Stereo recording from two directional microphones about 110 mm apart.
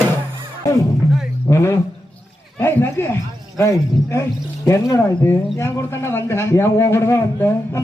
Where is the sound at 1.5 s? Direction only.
25° left (ahead or behind).